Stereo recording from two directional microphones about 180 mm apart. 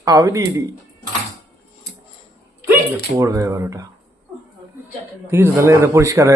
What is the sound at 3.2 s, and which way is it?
Speech, 15° right (ahead or behind).